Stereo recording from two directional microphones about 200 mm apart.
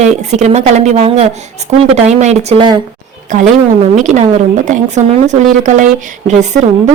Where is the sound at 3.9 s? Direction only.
35° right (ahead or behind).